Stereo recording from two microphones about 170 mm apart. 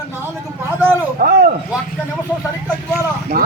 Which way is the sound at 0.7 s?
10° right (ahead or behind).